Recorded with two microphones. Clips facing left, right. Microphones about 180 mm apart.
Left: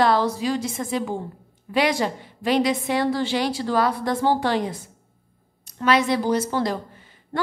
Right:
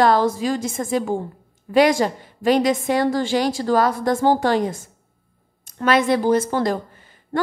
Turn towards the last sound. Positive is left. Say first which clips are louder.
# right 4 dB
turn(degrees=-50)  # may be behind; listen again after turning